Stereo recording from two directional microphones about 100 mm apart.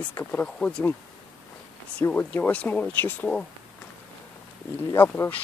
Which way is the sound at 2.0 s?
15° left (ahead or behind).